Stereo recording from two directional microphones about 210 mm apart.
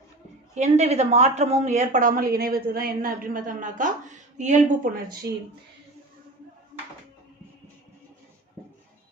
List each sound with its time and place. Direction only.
0.5 s a woman's voice: 30° right (ahead or behind)